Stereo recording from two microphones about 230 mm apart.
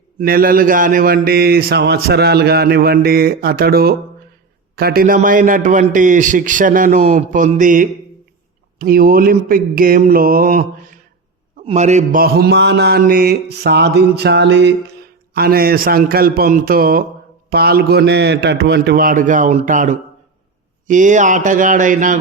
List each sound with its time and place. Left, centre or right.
0.2 s a man's voice: right
11.6 s mantra: right
15.4 s a man's voice: right